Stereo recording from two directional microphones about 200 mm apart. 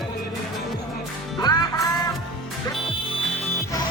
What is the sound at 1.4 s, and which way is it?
Music, 20° left (ahead or behind).